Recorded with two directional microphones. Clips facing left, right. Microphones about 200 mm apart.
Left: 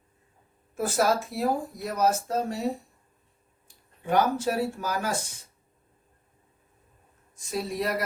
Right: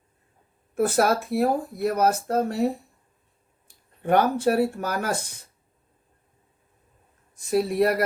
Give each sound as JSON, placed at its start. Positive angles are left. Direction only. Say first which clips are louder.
{"t": 0.8, "sound": "speech", "louder": "right 4 dB", "side_deg": -60}
{"t": 4.0, "sound": "speech", "louder": "right 4 dB", "side_deg": -60}
{"t": 7.3, "sound": "speech", "louder": "right 9 dB", "side_deg": -60}